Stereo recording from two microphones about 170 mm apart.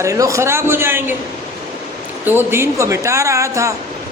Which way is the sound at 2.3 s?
15° right (ahead or behind).